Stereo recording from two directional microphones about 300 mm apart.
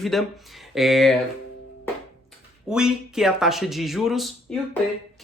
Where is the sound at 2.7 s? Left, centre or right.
Centre.